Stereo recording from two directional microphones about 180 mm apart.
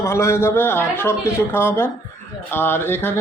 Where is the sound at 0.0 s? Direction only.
15° left (ahead or behind).